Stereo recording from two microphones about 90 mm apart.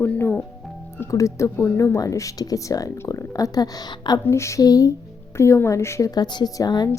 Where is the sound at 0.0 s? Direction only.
20° left (ahead or behind).